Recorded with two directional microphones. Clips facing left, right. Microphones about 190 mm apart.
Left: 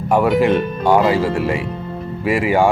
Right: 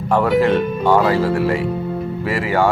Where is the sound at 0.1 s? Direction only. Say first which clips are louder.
Left 1 dB; 10° left (ahead or behind).